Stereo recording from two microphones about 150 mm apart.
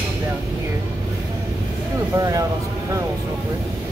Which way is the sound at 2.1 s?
25° right (ahead or behind).